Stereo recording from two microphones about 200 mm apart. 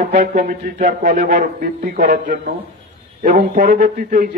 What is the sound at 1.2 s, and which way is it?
A man's voice, 50° right (ahead or behind).